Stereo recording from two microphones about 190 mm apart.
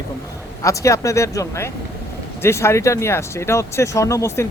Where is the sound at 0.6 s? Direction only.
15° left (ahead or behind).